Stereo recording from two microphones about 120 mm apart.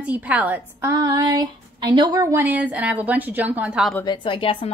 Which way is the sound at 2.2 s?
15° right (ahead or behind).